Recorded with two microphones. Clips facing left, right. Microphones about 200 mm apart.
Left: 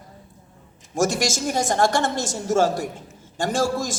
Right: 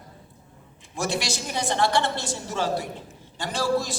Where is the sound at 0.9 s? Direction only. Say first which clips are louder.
Left 6 dB; 45° left (ahead or behind).